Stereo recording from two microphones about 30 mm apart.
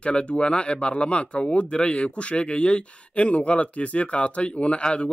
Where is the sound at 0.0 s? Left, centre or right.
Left.